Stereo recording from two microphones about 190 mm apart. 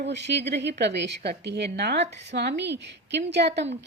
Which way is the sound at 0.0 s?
65° right (ahead or behind).